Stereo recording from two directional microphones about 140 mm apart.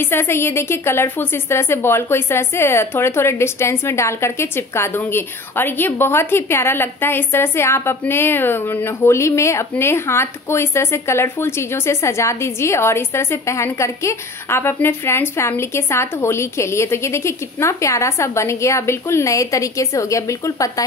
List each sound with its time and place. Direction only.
0.0 s a woman's voice: 15° left (ahead or behind)